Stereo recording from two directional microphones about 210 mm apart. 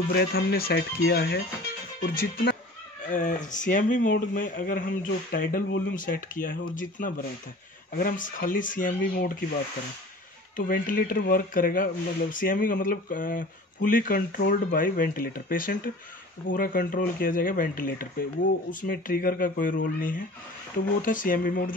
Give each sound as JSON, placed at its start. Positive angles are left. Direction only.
{"t": 0.1, "sound": "speech", "side_deg": 50}
{"t": 10.5, "sound": "speech", "side_deg": 40}